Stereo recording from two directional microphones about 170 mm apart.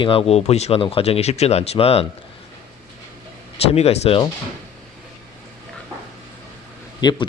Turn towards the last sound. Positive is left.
turn(degrees=25)  # may be behind; listen again after turning